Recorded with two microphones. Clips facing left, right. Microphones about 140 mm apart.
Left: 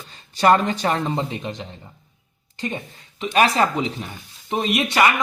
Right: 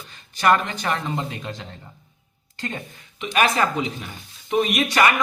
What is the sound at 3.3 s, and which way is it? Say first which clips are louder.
Speech: left 2 dB; 35° left (ahead or behind).